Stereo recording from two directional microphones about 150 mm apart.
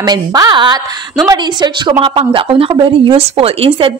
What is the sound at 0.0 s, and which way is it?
A woman's voice, 25° right (ahead or behind).